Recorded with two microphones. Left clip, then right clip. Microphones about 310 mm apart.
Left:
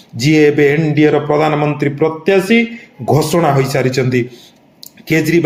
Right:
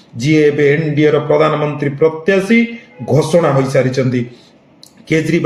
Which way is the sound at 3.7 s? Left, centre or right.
Left.